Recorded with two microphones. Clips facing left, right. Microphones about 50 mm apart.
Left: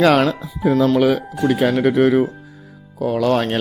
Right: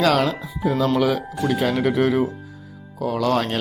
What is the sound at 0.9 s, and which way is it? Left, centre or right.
Speech, left.